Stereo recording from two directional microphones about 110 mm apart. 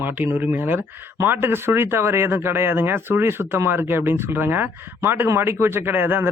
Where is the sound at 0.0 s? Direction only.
20° right (ahead or behind).